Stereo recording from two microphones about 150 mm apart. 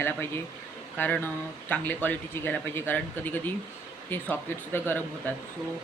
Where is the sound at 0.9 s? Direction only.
10° left (ahead or behind).